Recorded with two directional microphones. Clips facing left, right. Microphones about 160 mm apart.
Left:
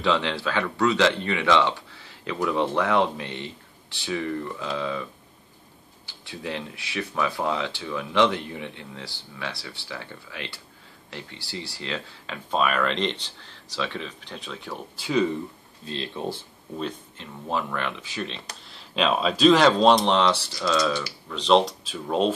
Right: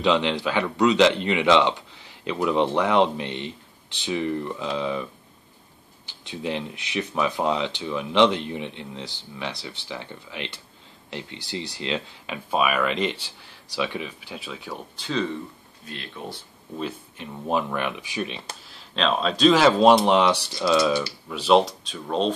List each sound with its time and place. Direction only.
0.0 s speech: 15° right (ahead or behind)
6.0 s speech: 20° right (ahead or behind); by 15.0 s centre (ahead or behind)
15.0 s speech: 10° left (ahead or behind)
15.8 s speech: 25° left (ahead or behind)
17.2 s speech: 15° right (ahead or behind)
18.6 s speech: centre (ahead or behind)